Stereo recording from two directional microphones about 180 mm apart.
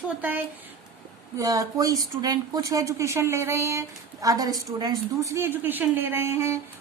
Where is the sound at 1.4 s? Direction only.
20° right (ahead or behind).